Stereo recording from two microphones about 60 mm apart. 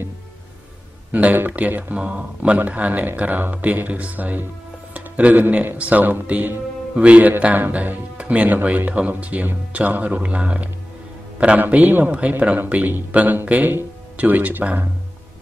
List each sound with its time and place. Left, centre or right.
1.1 s a man's voice: right
11.6 s speech: right